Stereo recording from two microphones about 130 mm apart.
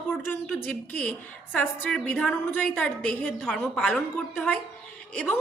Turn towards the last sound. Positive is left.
turn(degrees=10)  # may be behind; listen again after turning